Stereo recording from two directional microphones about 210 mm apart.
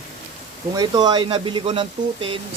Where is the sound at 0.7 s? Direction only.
20° right (ahead or behind).